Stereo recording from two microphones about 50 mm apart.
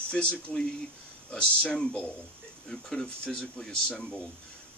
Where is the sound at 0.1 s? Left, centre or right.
Left.